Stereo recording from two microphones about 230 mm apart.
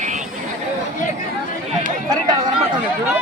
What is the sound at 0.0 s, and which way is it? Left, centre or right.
Chatter, right.